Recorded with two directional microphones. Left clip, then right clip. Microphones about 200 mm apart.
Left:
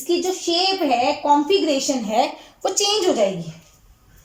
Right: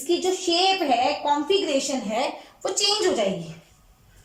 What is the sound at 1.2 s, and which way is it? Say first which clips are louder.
A woman's voice: left 5 dB; 15° left (ahead or behind).